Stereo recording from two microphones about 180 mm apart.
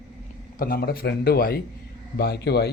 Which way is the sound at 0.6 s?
60° left (ahead or behind).